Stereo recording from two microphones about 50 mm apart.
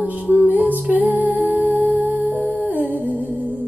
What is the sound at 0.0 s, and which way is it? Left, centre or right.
Music, right.